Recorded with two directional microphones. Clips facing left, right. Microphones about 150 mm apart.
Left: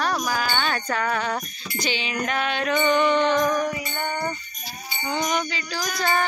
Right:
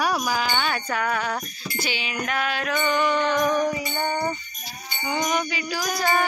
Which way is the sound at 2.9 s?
10° right (ahead or behind).